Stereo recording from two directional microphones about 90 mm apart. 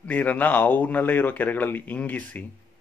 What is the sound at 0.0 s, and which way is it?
Speech, 20° left (ahead or behind).